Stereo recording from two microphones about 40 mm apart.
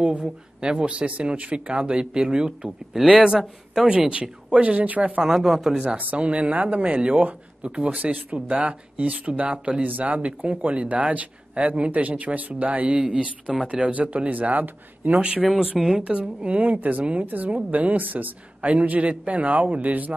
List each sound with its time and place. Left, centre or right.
0.0 s speech: right
5.2 s a man's voice: centre
6.1 s speech: right
9.1 s speech: right
9.8 s speech: right
13.0 s speech: right
15.1 s speech: right
17.3 s a woman's voice: right